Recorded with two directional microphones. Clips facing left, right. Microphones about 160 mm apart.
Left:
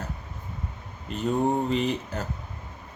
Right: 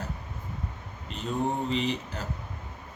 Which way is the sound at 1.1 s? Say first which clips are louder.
Left 7 dB; 50° left (ahead or behind).